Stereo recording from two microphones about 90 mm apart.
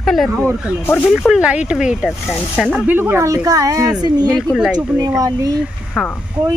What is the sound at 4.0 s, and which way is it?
Speech, 50° right (ahead or behind).